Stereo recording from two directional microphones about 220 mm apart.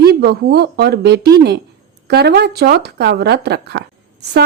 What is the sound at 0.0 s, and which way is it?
A woman's voice, 45° right (ahead or behind).